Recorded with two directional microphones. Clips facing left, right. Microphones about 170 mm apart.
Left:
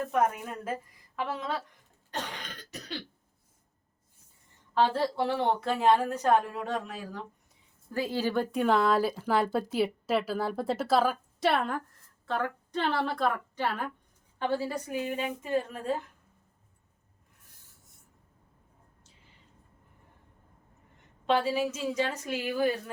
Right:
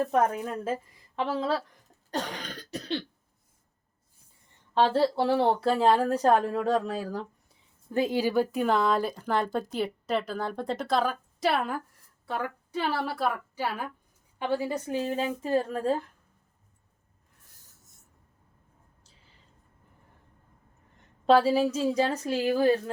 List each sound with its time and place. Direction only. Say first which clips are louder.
0.0 s a woman's voice: right 3 dB; 35° right (ahead or behind)
2.0 s cough: right 5 dB; 35° right (ahead or behind)
4.7 s a woman's voice: right 3 dB; 30° right (ahead or behind)
7.9 s a woman's voice: right 4 dB; 20° right (ahead or behind)
21.2 s a woman's voice: right 6 dB; 35° right (ahead or behind)